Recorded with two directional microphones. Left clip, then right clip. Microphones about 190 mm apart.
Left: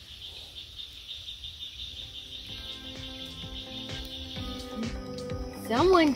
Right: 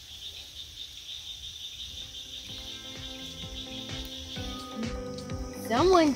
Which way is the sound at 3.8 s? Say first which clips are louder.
Even; centre (ahead or behind).